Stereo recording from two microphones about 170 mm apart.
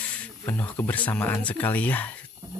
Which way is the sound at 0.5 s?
10° left (ahead or behind).